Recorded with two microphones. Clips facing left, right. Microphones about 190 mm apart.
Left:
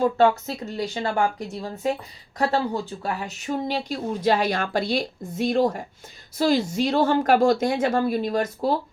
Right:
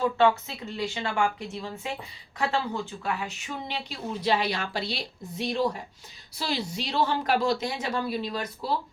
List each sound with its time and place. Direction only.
0.0 s speech: 40° left (ahead or behind)